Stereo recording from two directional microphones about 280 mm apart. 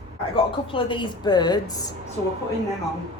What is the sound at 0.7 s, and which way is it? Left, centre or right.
A woman's voice, centre.